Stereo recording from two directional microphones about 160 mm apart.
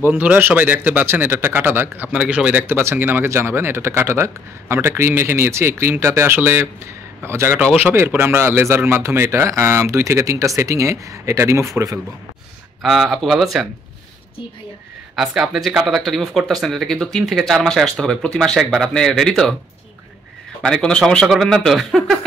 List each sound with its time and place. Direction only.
0.0 s speech: 10° right (ahead or behind)
12.8 s speech: centre (ahead or behind)
15.1 s speech: centre (ahead or behind)
20.6 s speech: 5° left (ahead or behind)